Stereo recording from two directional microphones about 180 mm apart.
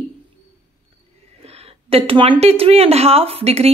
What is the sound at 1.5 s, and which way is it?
Speech, 35° right (ahead or behind).